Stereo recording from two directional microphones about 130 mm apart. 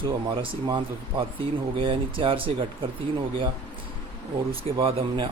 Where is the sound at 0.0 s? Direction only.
40° right (ahead or behind).